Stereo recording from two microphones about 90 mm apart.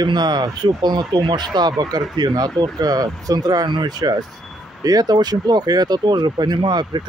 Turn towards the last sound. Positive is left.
turn(degrees=-55)  # may be behind; listen again after turning